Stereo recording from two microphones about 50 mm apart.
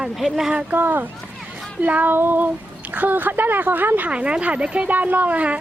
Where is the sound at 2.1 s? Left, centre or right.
Right.